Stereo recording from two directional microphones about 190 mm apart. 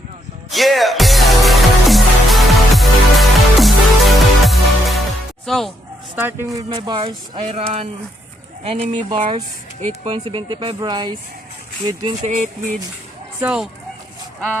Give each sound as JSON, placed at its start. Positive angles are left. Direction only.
{"t": 0.5, "sound": "music", "side_deg": 0}
{"t": 6.1, "sound": "speech", "side_deg": -10}
{"t": 12.2, "sound": "music", "side_deg": -40}
{"t": 13.4, "sound": "speech", "side_deg": -5}